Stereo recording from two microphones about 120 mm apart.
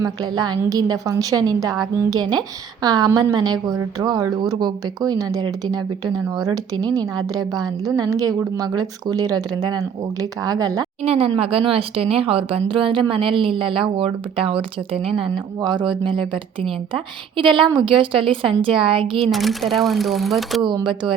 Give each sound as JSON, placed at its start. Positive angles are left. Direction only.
{"t": 0.0, "sound": "a woman's voice", "side_deg": -35}
{"t": 11.0, "sound": "a woman's voice", "side_deg": -55}
{"t": 19.2, "sound": "speech", "side_deg": 0}
{"t": 20.7, "sound": "speech", "side_deg": -40}